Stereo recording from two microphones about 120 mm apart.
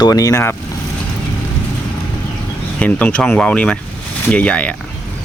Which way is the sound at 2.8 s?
10° left (ahead or behind).